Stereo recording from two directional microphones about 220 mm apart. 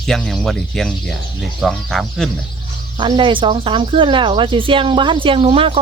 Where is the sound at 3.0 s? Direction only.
20° right (ahead or behind).